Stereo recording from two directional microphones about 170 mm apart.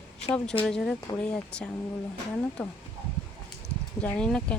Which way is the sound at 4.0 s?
5° left (ahead or behind).